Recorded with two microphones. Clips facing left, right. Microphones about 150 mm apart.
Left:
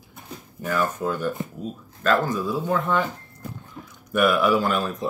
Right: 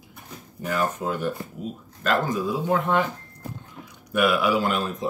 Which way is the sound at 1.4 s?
20° left (ahead or behind).